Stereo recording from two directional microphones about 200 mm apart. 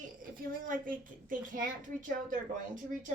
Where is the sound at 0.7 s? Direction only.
40° right (ahead or behind).